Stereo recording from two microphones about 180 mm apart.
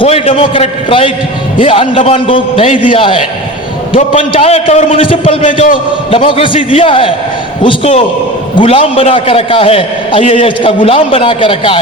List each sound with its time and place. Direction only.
0.0 s a man's voice: 30° left (ahead or behind)